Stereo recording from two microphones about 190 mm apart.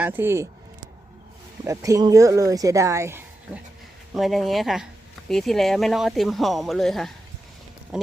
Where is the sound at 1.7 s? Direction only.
15° right (ahead or behind).